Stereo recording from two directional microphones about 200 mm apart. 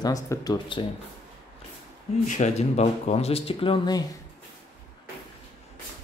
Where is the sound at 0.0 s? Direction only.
20° left (ahead or behind).